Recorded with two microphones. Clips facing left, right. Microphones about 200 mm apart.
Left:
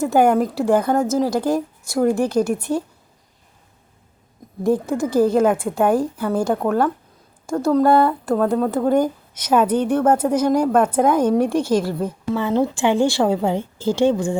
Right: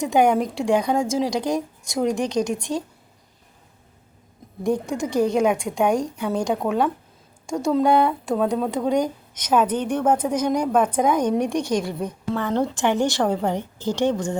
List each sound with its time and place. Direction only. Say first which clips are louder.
0.0 s speech: left 3 dB; 5° left (ahead or behind)
4.6 s a woman's voice: left 4 dB; 5° left (ahead or behind)
13.6 s speech: left 4 dB; 15° right (ahead or behind)
14.0 s a woman's voice: left 4 dB; 10° left (ahead or behind)